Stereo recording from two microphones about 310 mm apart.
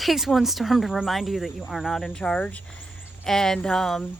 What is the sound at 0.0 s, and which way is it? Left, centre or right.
Speech, centre.